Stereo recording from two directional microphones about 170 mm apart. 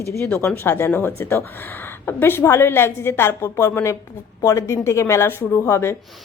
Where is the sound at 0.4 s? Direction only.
15° left (ahead or behind).